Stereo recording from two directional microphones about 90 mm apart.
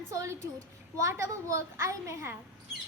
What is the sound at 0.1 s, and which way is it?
A woman's voice, 35° right (ahead or behind).